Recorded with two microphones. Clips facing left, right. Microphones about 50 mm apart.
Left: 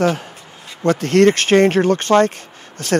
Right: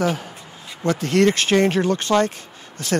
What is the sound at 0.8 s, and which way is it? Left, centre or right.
Speech, left.